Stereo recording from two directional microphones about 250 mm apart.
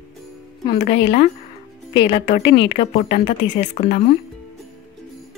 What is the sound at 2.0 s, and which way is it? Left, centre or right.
Speech, left.